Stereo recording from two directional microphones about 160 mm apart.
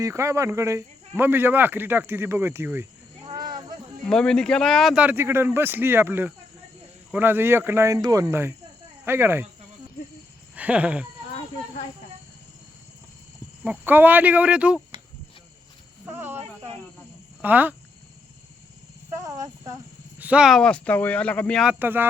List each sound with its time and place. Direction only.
0.0 s speech: 20° right (ahead or behind)
3.2 s a sound: 25° right (ahead or behind)
4.0 s speech: 5° left (ahead or behind)
5.0 s speech: 15° right (ahead or behind)
10.5 s a sound: 10° right (ahead or behind)
13.7 s speech: 10° right (ahead or behind)
16.0 s snake: 15° right (ahead or behind)
17.4 s speech: 10° right (ahead or behind)
19.2 s a sound: 20° right (ahead or behind)
20.1 s speech: 10° right (ahead or behind); by 21.6 s 10° left (ahead or behind)
21.6 s speech: 10° right (ahead or behind)